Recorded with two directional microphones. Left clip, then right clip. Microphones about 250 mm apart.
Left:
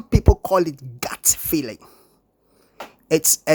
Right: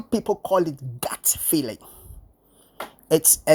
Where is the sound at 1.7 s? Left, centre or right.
Centre.